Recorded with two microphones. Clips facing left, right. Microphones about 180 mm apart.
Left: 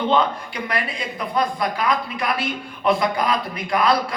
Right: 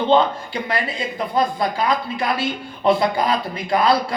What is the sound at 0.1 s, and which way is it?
Speech, 25° right (ahead or behind).